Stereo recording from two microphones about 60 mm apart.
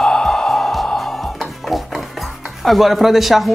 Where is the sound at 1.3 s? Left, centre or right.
Centre.